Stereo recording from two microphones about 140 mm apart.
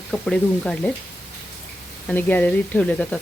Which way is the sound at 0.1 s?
5° left (ahead or behind).